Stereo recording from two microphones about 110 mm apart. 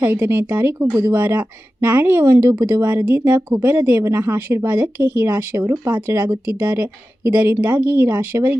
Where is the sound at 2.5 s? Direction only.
40° right (ahead or behind).